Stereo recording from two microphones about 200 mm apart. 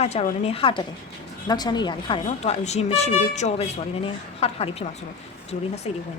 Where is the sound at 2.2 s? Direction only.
35° left (ahead or behind).